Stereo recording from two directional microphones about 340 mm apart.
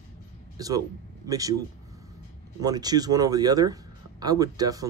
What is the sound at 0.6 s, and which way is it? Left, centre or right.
Speech, centre.